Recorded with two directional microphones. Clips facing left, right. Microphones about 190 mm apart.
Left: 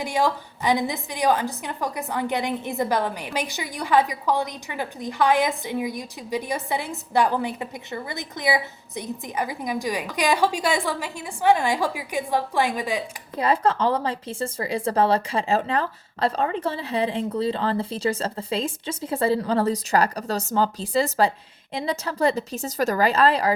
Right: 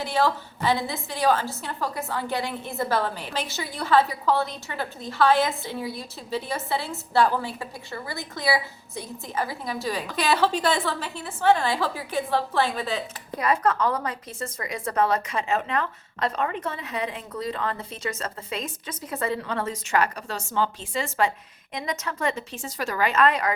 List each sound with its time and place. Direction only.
0.0 s a woman's voice: 15° left (ahead or behind)
13.4 s a woman's voice: 30° left (ahead or behind)